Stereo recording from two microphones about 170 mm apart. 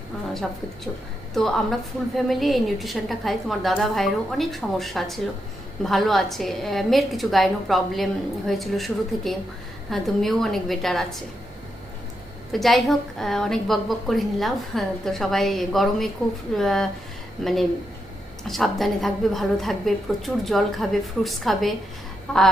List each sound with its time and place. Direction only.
1.3 s a woman's voice: centre (ahead or behind)
12.5 s a woman's voice: centre (ahead or behind)